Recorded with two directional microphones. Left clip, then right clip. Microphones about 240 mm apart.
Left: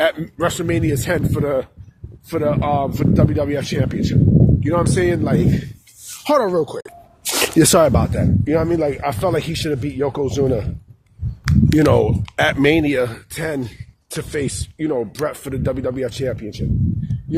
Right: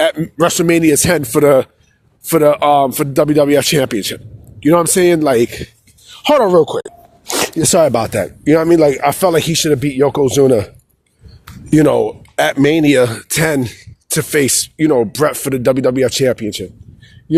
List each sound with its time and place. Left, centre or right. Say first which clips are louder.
0.0 s speech: right 5 dB; right
6.2 s speech: right 7 dB; right
7.3 s a sound: even; centre
7.8 s speech: right 4 dB; right
11.8 s speech: right 4 dB; right